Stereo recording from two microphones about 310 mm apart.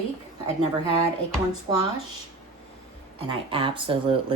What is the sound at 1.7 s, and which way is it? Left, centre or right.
Speech, centre.